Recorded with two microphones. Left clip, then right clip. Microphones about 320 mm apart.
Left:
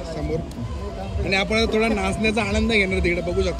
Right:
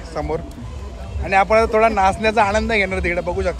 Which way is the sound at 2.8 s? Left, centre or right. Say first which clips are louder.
Right 1 dB; right.